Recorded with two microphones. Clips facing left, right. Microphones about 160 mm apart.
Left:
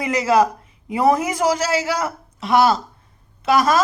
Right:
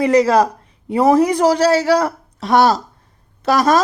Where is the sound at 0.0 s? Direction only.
35° right (ahead or behind).